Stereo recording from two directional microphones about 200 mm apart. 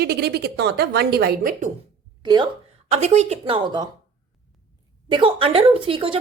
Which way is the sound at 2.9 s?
35° right (ahead or behind).